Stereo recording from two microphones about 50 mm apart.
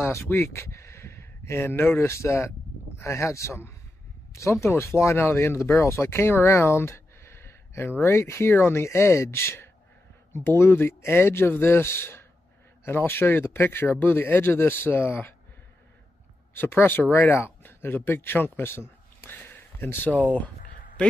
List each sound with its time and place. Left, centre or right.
0.3 s speech: left
2.0 s speech: left
16.5 s speech: left
19.3 s a sound: left